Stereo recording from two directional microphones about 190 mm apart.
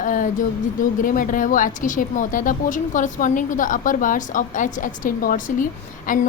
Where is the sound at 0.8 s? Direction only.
45° left (ahead or behind).